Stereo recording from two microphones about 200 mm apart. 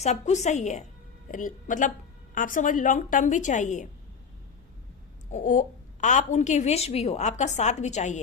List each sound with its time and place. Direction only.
0.0 s speech: 35° left (ahead or behind)
5.3 s speech: 40° left (ahead or behind)